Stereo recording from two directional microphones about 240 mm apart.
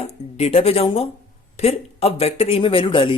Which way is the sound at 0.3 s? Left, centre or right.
Left.